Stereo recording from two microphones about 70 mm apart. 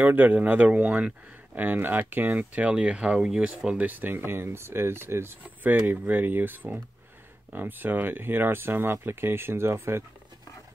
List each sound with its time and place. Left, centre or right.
0.0 s speech: right; by 3.4 s centre
3.6 s speech: right
5.4 s speech: right